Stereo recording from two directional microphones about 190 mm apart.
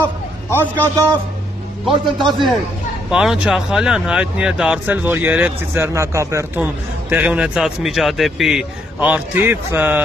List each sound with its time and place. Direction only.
0.0 s a sound: 10° left (ahead or behind)
1.9 s a man's voice: 25° right (ahead or behind)
3.1 s speech: 5° right (ahead or behind)